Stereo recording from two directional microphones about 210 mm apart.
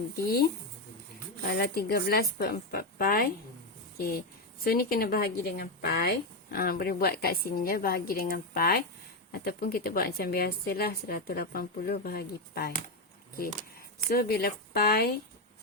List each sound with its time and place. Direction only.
0.2 s a woman's voice: 45° left (ahead or behind)
1.5 s a woman's voice: 45° left (ahead or behind)
14.1 s a woman's voice: 50° left (ahead or behind)